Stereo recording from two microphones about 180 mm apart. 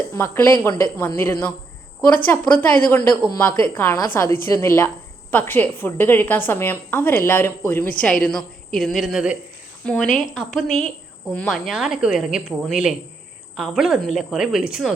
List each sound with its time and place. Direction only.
0.1 s a woman's voice: 10° left (ahead or behind); by 14.9 s 5° right (ahead or behind)